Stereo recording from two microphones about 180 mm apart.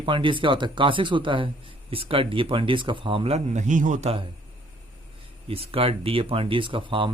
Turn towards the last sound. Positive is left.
turn(degrees=-30)  # may be behind; listen again after turning